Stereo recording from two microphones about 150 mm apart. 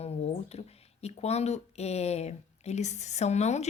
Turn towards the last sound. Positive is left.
turn(degrees=50)  # may be behind; listen again after turning